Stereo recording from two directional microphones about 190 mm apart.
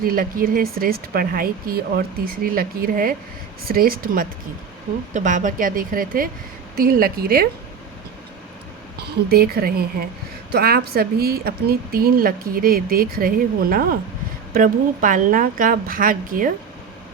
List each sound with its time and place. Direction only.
0.0 s speech: 50° right (ahead or behind)
9.0 s speech: 55° right (ahead or behind)